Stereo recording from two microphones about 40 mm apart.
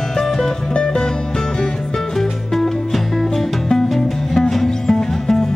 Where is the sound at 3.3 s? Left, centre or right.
Centre.